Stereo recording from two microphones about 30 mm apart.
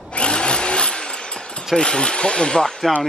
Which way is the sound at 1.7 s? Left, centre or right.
Left.